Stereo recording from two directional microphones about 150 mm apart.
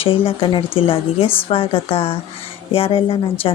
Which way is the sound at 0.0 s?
40° left (ahead or behind).